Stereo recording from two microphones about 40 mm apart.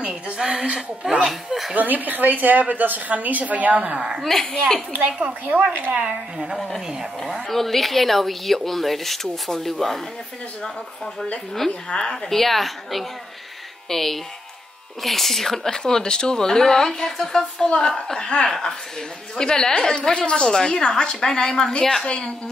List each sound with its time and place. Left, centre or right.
0.0 s a woman's voice: centre
1.2 s speech: centre
1.8 s a woman's voice: right
4.2 s speech: centre
4.9 s a woman's voice: right
5.9 s a woman's voice: right
7.3 s speech: centre
11.9 s speech: centre
17.6 s a woman's voice: left
20.0 s a woman's voice: left
22.0 s a woman's voice: left